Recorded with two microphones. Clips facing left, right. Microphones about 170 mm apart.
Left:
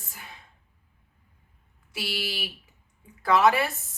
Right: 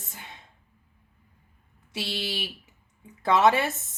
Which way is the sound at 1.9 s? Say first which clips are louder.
Right 1 dB; 25° right (ahead or behind).